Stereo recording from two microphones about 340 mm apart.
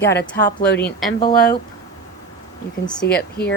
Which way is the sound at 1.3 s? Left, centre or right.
Left.